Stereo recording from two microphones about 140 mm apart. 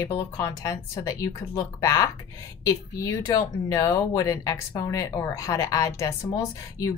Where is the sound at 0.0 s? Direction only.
20° left (ahead or behind).